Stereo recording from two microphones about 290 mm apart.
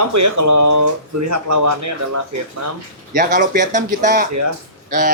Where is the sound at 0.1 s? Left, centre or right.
Right.